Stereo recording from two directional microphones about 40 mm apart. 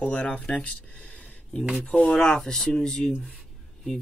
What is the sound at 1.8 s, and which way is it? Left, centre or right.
Speech, centre.